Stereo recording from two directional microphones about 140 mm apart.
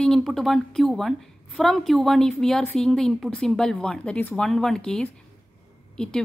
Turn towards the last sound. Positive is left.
turn(degrees=5)  # may be behind; listen again after turning